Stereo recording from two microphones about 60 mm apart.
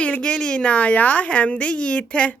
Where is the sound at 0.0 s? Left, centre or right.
Centre.